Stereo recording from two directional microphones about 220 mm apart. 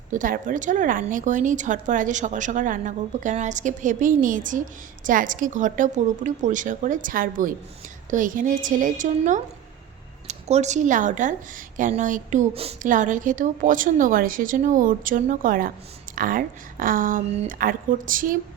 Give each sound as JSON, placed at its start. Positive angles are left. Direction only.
{"t": 0.1, "sound": "a woman's voice", "side_deg": -35}